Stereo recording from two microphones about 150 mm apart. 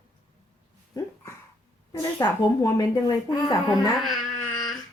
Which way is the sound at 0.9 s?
25° left (ahead or behind).